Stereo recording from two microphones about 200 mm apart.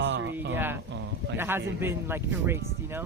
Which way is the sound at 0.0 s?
60° right (ahead or behind).